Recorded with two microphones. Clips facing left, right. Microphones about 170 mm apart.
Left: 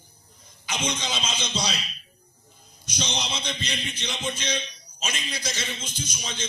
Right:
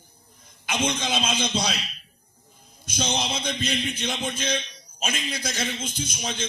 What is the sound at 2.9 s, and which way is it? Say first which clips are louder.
A man's voice: right 4 dB; 55° right (ahead or behind).